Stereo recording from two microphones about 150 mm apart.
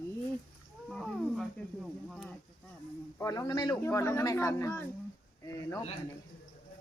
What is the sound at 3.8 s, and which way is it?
Speech, 20° left (ahead or behind).